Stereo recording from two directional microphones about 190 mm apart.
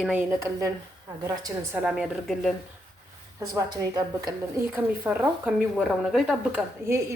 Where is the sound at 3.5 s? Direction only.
20° right (ahead or behind); by 6.6 s centre (ahead or behind).